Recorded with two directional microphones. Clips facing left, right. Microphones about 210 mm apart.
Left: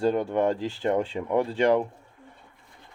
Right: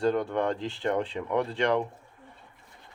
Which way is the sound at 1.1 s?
20° left (ahead or behind).